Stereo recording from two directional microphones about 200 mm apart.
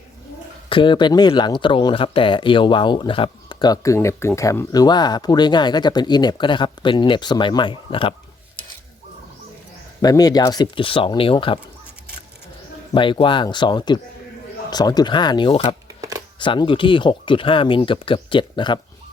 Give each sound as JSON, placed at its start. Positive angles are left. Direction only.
{"t": 0.7, "sound": "speech", "side_deg": 25}
{"t": 10.0, "sound": "speech", "side_deg": 20}
{"t": 12.9, "sound": "speech", "side_deg": 25}
{"t": 15.9, "sound": "shuffling cards", "side_deg": -15}
{"t": 16.4, "sound": "speech", "side_deg": 25}